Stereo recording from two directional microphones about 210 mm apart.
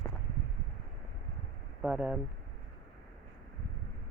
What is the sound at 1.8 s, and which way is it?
Speech, 5° right (ahead or behind).